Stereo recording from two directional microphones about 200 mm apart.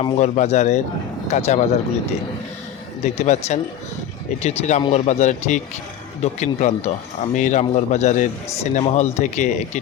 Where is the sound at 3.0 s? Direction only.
35° left (ahead or behind).